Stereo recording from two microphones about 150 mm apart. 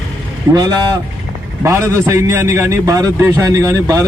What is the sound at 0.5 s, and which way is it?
A man's voice, 25° right (ahead or behind).